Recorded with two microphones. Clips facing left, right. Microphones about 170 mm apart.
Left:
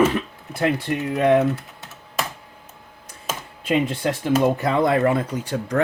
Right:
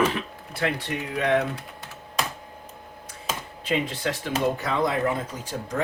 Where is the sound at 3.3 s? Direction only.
50° left (ahead or behind).